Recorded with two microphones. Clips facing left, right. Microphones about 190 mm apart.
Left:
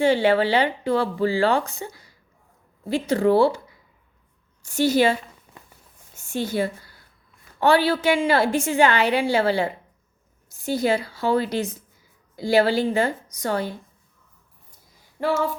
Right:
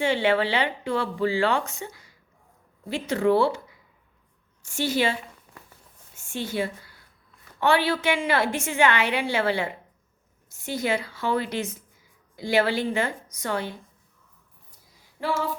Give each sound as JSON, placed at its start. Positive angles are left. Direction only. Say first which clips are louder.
{"t": 0.0, "sound": "speech", "louder": "left 4 dB", "side_deg": 35}
{"t": 4.6, "sound": "speech", "louder": "left 6 dB", "side_deg": 40}
{"t": 6.1, "sound": "a woman's voice", "louder": "left 4 dB", "side_deg": 40}